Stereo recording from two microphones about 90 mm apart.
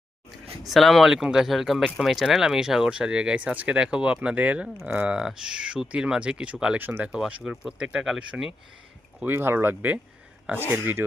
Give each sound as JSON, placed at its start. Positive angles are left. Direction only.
{"t": 0.6, "sound": "speech", "side_deg": 0}
{"t": 9.2, "sound": "speech", "side_deg": -25}